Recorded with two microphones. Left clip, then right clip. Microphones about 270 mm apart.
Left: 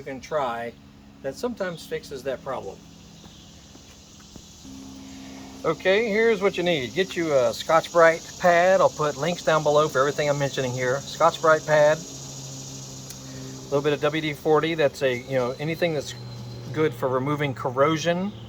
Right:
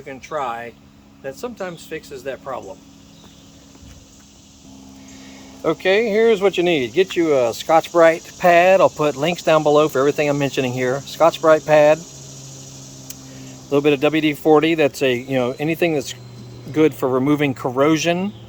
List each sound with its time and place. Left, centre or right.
0.1 s speech: centre
5.6 s speech: right
13.7 s speech: right